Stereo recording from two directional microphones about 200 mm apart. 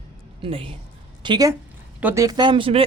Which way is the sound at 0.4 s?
30° right (ahead or behind).